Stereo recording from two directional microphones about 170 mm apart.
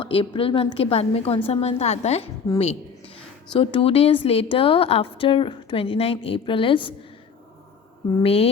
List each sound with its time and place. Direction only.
0.0 s a woman's voice: 35° left (ahead or behind)
3.5 s a woman's voice: 30° left (ahead or behind)
8.2 s a woman's voice: 35° left (ahead or behind)